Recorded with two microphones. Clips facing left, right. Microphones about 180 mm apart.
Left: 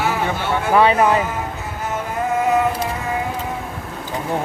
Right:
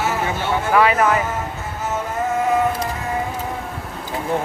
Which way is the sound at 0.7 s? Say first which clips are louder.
Left 2 dB; 25° left (ahead or behind).